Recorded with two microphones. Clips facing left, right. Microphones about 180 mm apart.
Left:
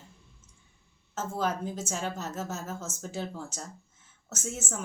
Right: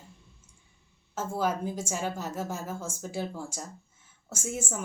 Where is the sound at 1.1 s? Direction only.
10° right (ahead or behind).